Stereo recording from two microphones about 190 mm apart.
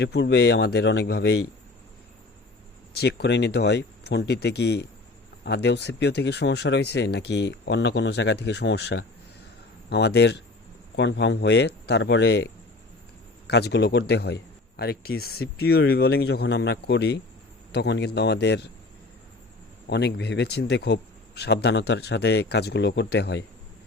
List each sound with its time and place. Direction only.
0.0 s speech: 65° left (ahead or behind)
3.0 s speech: 65° left (ahead or behind)
13.5 s speech: 60° left (ahead or behind)
19.9 s speech: 60° left (ahead or behind)